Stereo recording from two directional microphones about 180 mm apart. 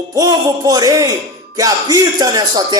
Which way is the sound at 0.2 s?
20° right (ahead or behind).